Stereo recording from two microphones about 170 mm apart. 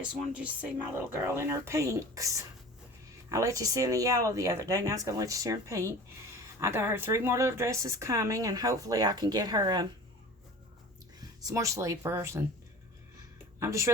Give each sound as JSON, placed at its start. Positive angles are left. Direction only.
{"t": 0.0, "sound": "speech", "side_deg": -10}
{"t": 11.4, "sound": "speech", "side_deg": -20}
{"t": 13.6, "sound": "speech", "side_deg": -15}